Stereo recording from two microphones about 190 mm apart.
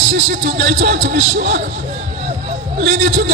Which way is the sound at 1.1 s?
45° right (ahead or behind).